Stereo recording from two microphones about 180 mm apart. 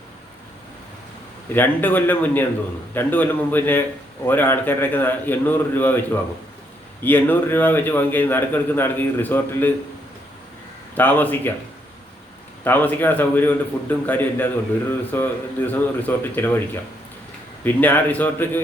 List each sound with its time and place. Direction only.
1.5 s a man's voice: 10° left (ahead or behind)
7.0 s a man's voice: 10° left (ahead or behind)
10.9 s a man's voice: 10° left (ahead or behind)
12.6 s a man's voice: 10° left (ahead or behind)
17.6 s a man's voice: 10° left (ahead or behind)